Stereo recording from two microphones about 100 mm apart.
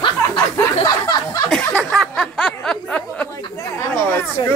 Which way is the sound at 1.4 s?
5° left (ahead or behind).